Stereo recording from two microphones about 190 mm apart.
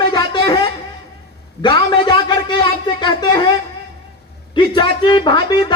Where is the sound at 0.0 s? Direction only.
25° left (ahead or behind).